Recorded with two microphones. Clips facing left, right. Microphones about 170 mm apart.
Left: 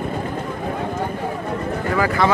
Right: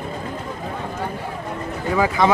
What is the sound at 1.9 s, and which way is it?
Speech, 15° right (ahead or behind).